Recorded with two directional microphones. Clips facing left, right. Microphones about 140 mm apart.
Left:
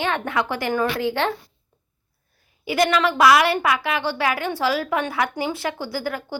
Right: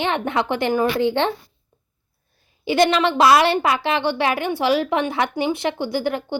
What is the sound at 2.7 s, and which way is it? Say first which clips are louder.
Speech: right 2 dB; 25° right (ahead or behind).